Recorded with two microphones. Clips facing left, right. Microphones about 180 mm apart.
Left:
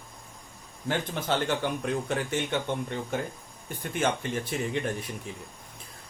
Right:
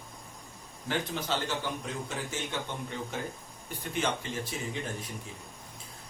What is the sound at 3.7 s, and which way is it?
A man's voice, 55° left (ahead or behind).